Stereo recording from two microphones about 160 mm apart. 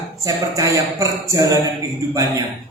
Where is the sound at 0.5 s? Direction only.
20° right (ahead or behind).